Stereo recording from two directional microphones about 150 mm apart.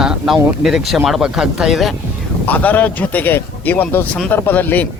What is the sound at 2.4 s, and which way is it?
A man's voice, 10° left (ahead or behind).